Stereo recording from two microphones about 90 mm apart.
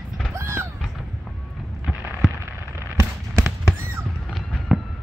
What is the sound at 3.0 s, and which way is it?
Fireworks, 30° right (ahead or behind).